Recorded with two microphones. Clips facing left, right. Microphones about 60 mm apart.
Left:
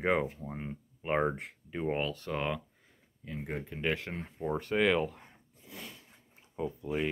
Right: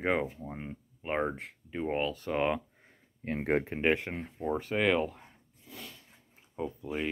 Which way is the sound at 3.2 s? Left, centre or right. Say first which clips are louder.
Right 9 dB; right.